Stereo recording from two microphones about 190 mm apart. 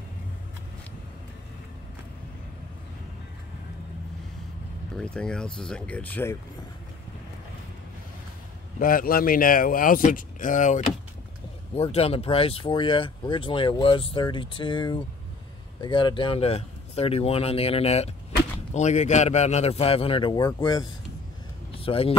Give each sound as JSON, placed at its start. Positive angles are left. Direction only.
{"t": 4.9, "sound": "speech", "side_deg": 5}
{"t": 8.7, "sound": "speech", "side_deg": 45}